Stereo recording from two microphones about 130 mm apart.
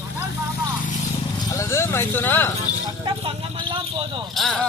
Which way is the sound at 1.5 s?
20° left (ahead or behind).